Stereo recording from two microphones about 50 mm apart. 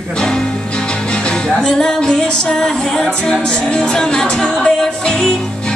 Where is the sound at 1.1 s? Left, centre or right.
Centre.